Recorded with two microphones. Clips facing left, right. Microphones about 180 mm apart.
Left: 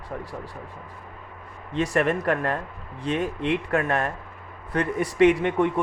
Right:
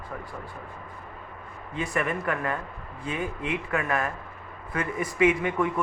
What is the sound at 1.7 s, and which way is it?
Speech, 90° left.